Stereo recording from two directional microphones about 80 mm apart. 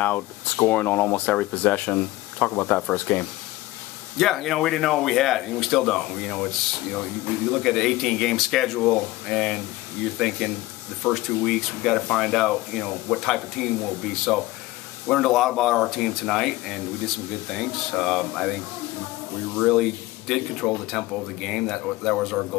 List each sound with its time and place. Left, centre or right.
0.0 s speech: left
4.2 s speech: centre
19.5 s speech: centre